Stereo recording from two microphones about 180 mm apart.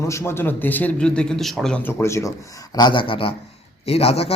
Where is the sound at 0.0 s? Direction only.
15° left (ahead or behind).